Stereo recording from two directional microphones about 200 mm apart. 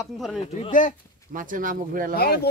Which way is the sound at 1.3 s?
40° right (ahead or behind).